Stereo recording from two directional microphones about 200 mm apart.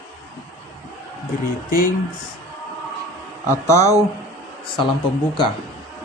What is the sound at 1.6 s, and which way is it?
Speech, 45° left (ahead or behind).